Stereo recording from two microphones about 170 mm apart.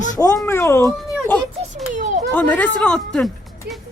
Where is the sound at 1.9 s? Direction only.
45° right (ahead or behind).